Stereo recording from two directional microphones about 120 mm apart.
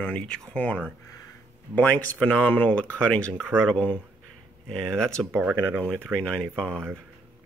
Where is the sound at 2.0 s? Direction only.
10° left (ahead or behind).